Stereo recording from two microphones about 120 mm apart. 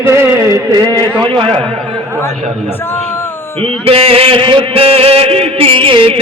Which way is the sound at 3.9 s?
50° right (ahead or behind).